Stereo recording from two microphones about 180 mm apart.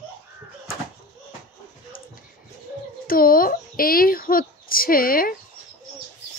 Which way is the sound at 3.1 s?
55° left (ahead or behind).